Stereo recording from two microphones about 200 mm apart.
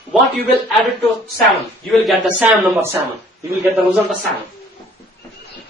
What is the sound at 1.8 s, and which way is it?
A man's voice, centre (ahead or behind).